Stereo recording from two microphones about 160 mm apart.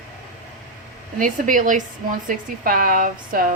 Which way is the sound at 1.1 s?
55° right (ahead or behind).